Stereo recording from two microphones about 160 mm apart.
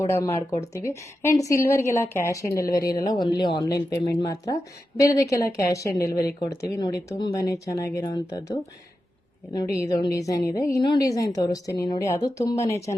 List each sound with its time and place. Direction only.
0.0 s a woman's voice: 20° left (ahead or behind)
1.4 s a woman's voice: 20° left (ahead or behind)
2.6 s speech: 65° left (ahead or behind)
3.0 s speech: 25° left (ahead or behind)
9.7 s speech: 20° left (ahead or behind)